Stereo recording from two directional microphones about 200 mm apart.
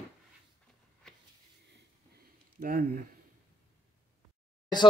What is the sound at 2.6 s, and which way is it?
Speech, 45° right (ahead or behind).